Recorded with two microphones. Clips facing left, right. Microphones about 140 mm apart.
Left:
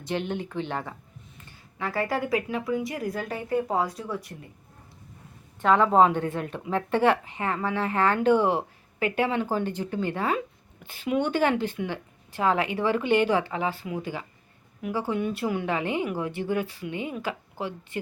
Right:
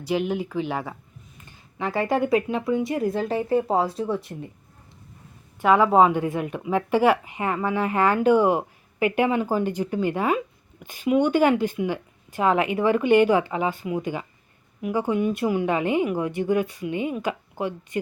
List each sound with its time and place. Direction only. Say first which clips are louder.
0.0 s a woman's voice: right 5 dB; 5° right (ahead or behind)
1.8 s speech: right 5 dB; 20° right (ahead or behind)
5.6 s a woman's voice: right 2 dB; 10° right (ahead or behind)